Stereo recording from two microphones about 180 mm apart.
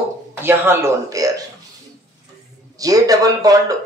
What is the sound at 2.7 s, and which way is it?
Speech, 20° right (ahead or behind).